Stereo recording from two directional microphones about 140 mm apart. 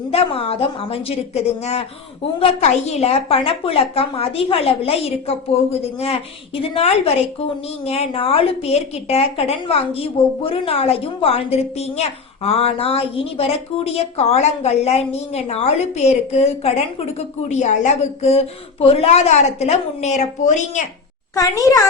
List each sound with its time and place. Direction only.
0.1 s a woman's voice: 45° left (ahead or behind)
21.3 s a child's voice: 25° left (ahead or behind)